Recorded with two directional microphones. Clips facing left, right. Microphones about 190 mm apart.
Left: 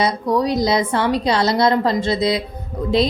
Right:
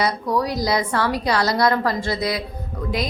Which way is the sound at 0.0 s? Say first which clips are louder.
Left 3 dB; 20° left (ahead or behind).